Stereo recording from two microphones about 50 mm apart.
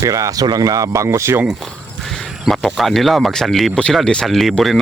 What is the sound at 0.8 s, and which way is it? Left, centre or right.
Speech, right.